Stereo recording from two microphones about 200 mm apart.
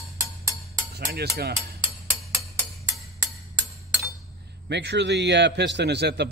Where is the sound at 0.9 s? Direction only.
50° right (ahead or behind).